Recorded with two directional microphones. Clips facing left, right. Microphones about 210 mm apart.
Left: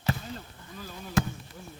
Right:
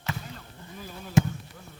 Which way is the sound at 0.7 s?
20° right (ahead or behind).